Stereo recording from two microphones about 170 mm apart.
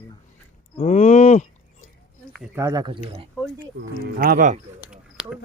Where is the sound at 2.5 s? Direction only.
20° right (ahead or behind).